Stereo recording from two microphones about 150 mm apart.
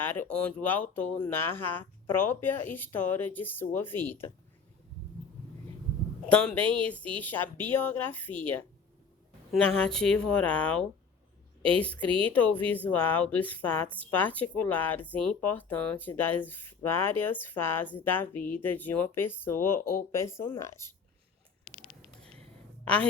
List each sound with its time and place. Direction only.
0.0 s a woman's voice: 10° left (ahead or behind)
6.2 s a woman's voice: 10° left (ahead or behind)
19.8 s speech: 80° left
20.1 s speech: 20° left (ahead or behind)
22.8 s a woman's voice: 10° left (ahead or behind)